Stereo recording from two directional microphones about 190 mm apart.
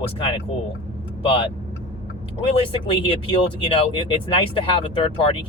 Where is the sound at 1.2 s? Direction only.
30° left (ahead or behind).